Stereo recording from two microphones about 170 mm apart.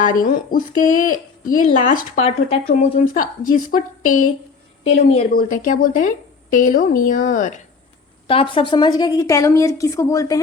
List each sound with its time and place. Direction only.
0.0 s a woman's voice: 55° left (ahead or behind)
2.2 s speech: 35° left (ahead or behind)
3.2 s a woman's voice: 55° left (ahead or behind)
4.9 s speech: 40° left (ahead or behind)
5.3 s a woman's voice: 55° left (ahead or behind)
8.3 s a woman's voice: 30° left (ahead or behind)